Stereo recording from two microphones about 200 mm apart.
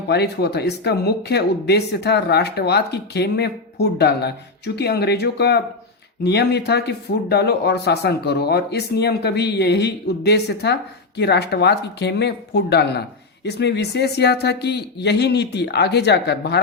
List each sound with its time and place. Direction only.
0.1 s speech: 55° left (ahead or behind)